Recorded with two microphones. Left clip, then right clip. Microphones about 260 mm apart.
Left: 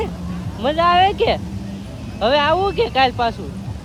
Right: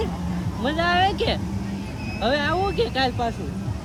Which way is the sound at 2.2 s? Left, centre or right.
Left.